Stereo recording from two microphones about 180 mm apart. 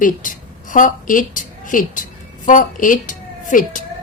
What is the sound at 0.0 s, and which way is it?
A woman's voice, 45° left (ahead or behind).